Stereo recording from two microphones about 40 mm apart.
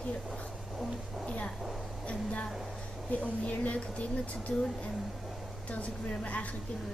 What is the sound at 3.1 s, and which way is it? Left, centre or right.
A woman's voice, left.